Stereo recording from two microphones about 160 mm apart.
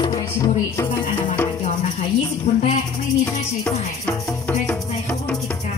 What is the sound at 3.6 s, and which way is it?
Music, 15° left (ahead or behind).